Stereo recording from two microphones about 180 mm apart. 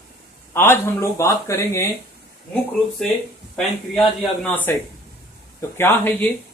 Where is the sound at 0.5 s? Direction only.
15° left (ahead or behind).